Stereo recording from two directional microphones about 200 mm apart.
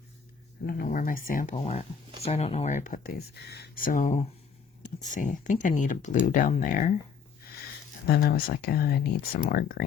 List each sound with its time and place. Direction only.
0.6 s speech: 50° left (ahead or behind)
8.0 s speech: 50° left (ahead or behind)